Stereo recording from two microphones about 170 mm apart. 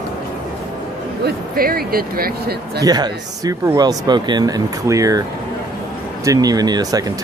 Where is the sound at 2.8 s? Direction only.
25° right (ahead or behind).